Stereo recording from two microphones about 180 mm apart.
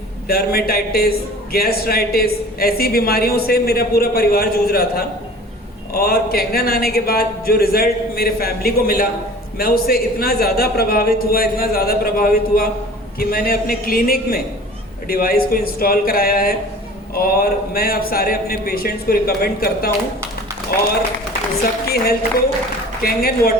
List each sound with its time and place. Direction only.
0.3 s speech: 60° left (ahead or behind)
21.6 s speech: 60° left (ahead or behind)